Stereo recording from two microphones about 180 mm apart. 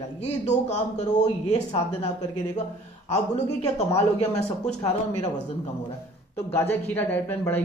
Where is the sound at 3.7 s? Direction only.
40° left (ahead or behind).